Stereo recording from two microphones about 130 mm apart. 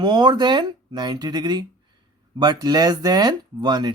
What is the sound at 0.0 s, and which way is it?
Speech, 35° right (ahead or behind).